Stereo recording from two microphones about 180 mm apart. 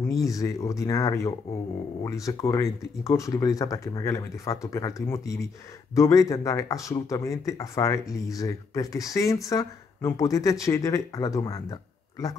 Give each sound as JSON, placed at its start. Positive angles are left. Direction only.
{"t": 0.0, "sound": "speech", "side_deg": 20}